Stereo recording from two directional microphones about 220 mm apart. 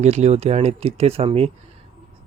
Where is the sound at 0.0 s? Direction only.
30° right (ahead or behind).